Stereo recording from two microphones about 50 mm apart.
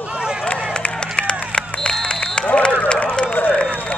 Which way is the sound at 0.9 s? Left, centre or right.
Centre.